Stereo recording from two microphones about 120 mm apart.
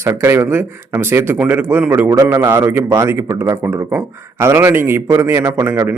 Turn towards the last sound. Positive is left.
turn(degrees=-20)  # may be behind; listen again after turning